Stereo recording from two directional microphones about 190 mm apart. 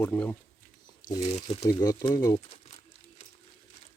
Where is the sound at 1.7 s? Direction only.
20° left (ahead or behind).